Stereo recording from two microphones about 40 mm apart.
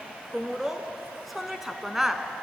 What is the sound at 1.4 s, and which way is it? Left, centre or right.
Speech, centre.